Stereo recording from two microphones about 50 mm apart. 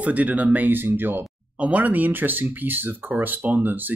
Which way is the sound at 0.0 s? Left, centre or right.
Right.